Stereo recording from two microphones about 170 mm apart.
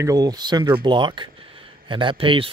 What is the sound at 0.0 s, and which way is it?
Speech, 20° right (ahead or behind).